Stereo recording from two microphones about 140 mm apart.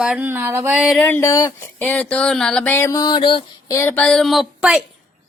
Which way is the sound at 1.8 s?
10° left (ahead or behind).